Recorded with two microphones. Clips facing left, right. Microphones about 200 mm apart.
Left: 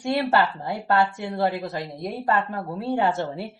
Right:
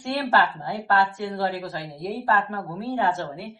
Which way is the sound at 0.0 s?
20° left (ahead or behind).